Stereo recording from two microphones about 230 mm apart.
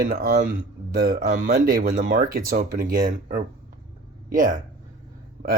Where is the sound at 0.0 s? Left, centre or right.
Right.